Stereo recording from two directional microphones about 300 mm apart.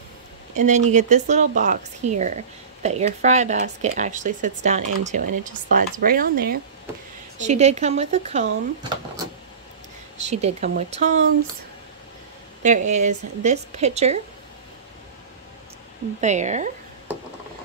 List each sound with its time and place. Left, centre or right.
0.6 s speech: right
10.4 s speech: right
12.6 s speech: right
16.2 s speech: right